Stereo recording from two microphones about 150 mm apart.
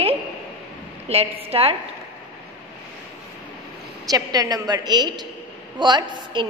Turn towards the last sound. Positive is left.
turn(degrees=-30)  # may be behind; listen again after turning